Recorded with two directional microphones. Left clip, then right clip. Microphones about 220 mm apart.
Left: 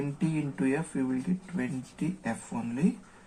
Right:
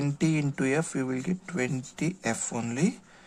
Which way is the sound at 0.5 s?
55° right (ahead or behind).